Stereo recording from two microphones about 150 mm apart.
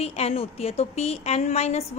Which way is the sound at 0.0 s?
45° left (ahead or behind).